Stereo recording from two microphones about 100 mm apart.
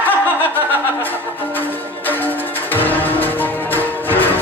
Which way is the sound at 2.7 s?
20° left (ahead or behind).